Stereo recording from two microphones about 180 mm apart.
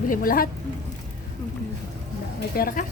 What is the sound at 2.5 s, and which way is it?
Speech, 50° left (ahead or behind).